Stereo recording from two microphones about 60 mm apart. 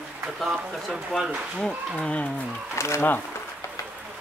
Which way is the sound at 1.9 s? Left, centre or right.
Left.